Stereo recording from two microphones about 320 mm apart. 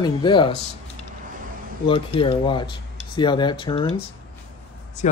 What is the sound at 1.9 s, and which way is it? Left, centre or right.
Speech, centre.